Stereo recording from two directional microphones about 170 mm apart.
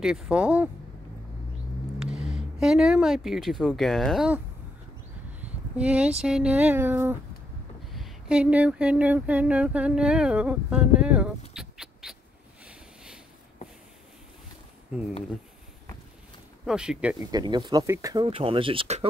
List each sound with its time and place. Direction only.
0.0 s a sound: 5° right (ahead or behind)
2.0 s speech: 5° right (ahead or behind)
5.4 s speech: 10° right (ahead or behind)
7.9 s a sound: 5° right (ahead or behind)
11.5 s bird: 5° right (ahead or behind)
12.6 s a sound: 5° right (ahead or behind)
16.6 s speech: 5° right (ahead or behind)
17.3 s speech: 25° right (ahead or behind)
18.2 s speech: 35° right (ahead or behind)